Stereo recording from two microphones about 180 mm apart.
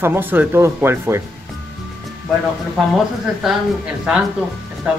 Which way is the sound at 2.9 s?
Centre (ahead or behind).